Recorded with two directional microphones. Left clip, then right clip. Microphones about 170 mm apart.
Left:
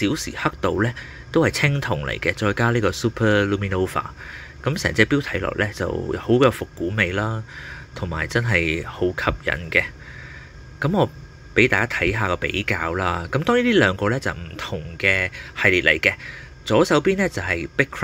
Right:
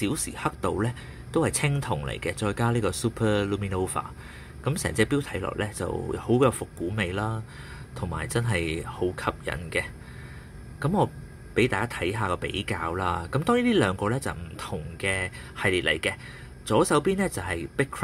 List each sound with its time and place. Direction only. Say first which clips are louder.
0.0 s speech: left 6 dB; 15° left (ahead or behind)